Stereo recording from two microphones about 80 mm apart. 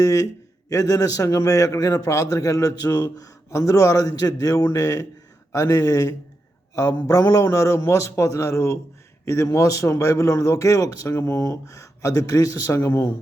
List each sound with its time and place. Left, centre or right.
0.0 s a man's voice: left